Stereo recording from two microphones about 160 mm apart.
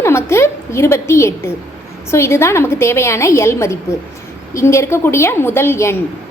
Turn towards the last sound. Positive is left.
turn(degrees=15)  # may be behind; listen again after turning